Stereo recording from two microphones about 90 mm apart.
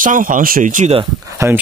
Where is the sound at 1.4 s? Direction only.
30° right (ahead or behind).